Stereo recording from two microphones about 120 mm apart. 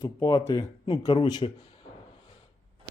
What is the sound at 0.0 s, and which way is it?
Speech, 30° left (ahead or behind).